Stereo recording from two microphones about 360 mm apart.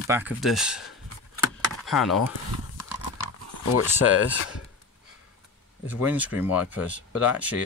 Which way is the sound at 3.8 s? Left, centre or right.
Centre.